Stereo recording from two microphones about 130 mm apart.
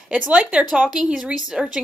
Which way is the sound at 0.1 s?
10° right (ahead or behind).